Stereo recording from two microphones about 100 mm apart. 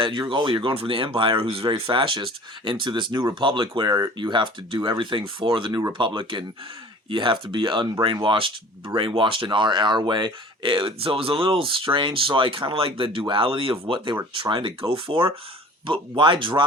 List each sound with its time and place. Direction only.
0.0 s speech: 55° right (ahead or behind)
1.6 s speech: 50° right (ahead or behind)